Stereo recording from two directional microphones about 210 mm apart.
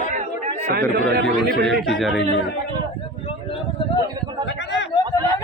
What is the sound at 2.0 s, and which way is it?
Speech, centre (ahead or behind).